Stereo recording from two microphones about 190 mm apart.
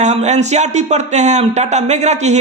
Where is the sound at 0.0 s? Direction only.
35° right (ahead or behind).